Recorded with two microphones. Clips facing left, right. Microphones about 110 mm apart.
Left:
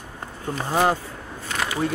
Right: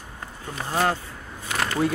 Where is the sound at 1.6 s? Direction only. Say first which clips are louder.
Right 1 dB; centre (ahead or behind).